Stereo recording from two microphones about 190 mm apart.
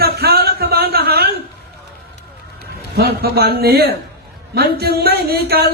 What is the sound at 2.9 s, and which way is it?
Speech, 55° right (ahead or behind).